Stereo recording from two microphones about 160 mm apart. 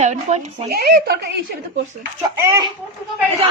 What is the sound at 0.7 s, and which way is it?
Speech, 90° right.